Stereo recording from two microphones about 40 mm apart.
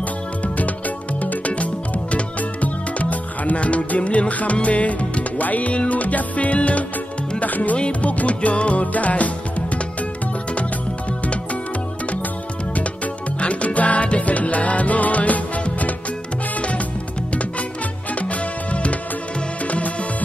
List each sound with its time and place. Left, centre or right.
0.6 s music: left
12.7 s music: left
18.3 s music: left